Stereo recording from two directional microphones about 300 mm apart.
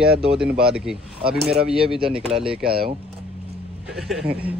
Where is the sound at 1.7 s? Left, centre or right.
Centre.